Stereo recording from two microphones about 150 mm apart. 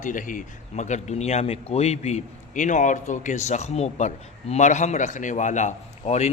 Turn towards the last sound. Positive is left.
turn(degrees=50)  # may be behind; listen again after turning